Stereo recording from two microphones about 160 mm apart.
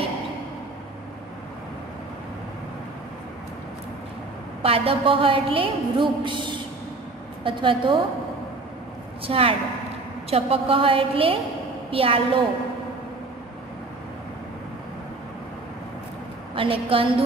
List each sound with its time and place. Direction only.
4.6 s a woman's voice: 35° right (ahead or behind)
9.2 s a woman's voice: 35° right (ahead or behind)
16.5 s a woman's voice: 35° right (ahead or behind)